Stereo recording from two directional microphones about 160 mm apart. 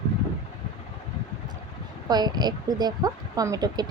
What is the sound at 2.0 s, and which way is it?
A woman's voice, 25° right (ahead or behind).